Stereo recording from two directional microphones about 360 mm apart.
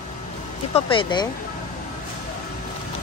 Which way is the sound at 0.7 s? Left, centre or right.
Centre.